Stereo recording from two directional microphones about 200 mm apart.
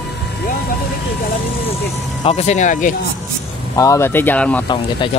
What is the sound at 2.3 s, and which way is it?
Speech, 35° left (ahead or behind).